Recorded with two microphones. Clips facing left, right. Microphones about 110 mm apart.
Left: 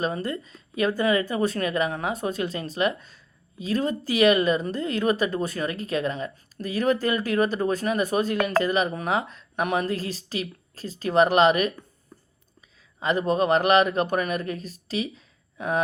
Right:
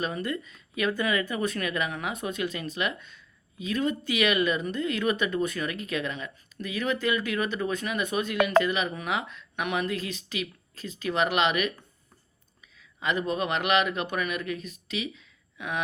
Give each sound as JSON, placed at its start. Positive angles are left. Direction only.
{"t": 0.0, "sound": "speech", "side_deg": 30}
{"t": 13.0, "sound": "speech", "side_deg": 35}